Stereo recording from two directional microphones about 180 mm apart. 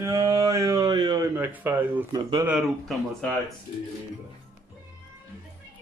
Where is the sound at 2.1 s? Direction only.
20° right (ahead or behind).